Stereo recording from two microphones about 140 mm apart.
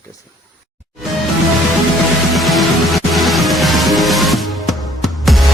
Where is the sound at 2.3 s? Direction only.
Centre (ahead or behind).